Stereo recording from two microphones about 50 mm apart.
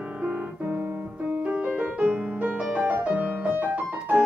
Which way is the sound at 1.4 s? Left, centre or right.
Right.